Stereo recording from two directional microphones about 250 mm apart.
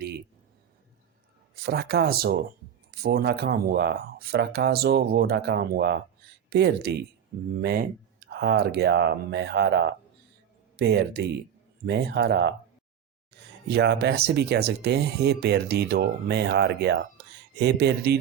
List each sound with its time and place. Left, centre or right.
1.6 s speech: right
13.3 s a sound: right
13.7 s speech: right